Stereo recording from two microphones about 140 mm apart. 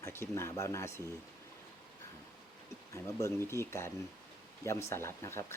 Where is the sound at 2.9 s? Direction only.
20° left (ahead or behind).